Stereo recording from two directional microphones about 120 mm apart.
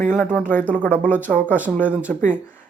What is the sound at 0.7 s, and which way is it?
Speech, 10° left (ahead or behind).